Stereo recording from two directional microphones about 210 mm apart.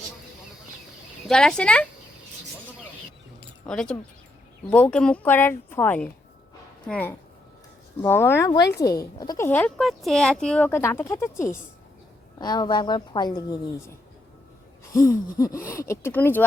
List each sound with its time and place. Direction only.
1.3 s speech: 5° left (ahead or behind)
3.7 s speech: 5° left (ahead or behind)
12.4 s a woman's voice: 20° left (ahead or behind)
14.9 s speech: 15° left (ahead or behind)